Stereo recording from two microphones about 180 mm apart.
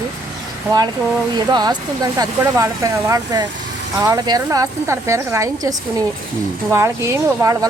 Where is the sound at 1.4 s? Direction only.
25° right (ahead or behind).